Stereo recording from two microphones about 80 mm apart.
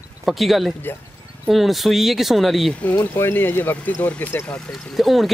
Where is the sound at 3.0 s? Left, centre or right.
Left.